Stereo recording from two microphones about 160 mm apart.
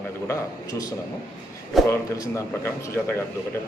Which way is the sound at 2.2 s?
15° left (ahead or behind).